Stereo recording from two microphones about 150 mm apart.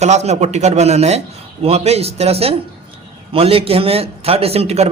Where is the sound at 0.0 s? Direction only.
50° right (ahead or behind).